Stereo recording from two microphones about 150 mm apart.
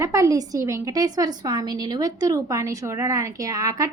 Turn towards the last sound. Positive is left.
turn(degrees=-25)  # may be behind; listen again after turning